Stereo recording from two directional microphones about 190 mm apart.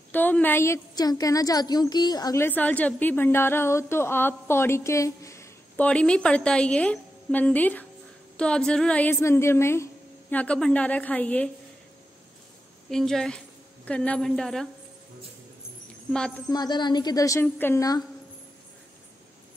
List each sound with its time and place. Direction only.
0.1 s a woman's voice: 10° left (ahead or behind)
12.9 s a woman's voice: centre (ahead or behind)
16.1 s a woman's voice: 5° left (ahead or behind)
16.4 s a woman's voice: 20° left (ahead or behind)